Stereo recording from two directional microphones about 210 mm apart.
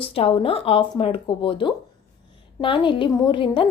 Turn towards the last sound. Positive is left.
turn(degrees=25)  # may be behind; listen again after turning